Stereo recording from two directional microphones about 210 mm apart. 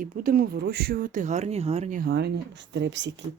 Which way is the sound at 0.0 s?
45° right (ahead or behind).